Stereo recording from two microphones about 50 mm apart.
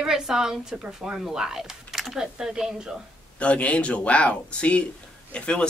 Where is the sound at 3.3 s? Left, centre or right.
Left.